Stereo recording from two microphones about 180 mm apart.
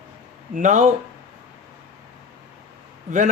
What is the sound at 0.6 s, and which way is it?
Speech, 45° right (ahead or behind).